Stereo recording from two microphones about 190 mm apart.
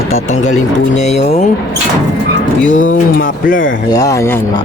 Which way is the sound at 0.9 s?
35° left (ahead or behind).